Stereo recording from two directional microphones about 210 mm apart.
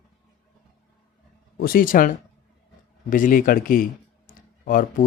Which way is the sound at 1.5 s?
45° left (ahead or behind).